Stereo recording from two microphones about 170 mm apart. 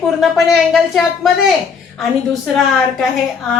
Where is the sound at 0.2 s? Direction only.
Centre (ahead or behind).